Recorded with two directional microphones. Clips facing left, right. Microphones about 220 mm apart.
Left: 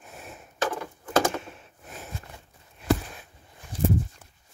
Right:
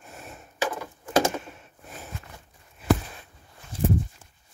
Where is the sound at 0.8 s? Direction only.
15° right (ahead or behind).